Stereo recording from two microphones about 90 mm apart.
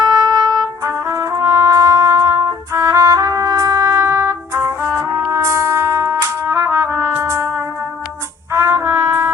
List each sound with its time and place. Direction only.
0.3 s trumpet: 35° right (ahead or behind)
8.5 s brass instrument: 30° right (ahead or behind)